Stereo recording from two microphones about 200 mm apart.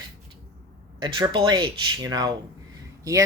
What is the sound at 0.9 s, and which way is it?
Speech, 25° right (ahead or behind).